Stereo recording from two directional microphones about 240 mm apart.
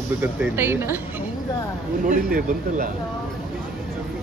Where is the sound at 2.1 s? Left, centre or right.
Right.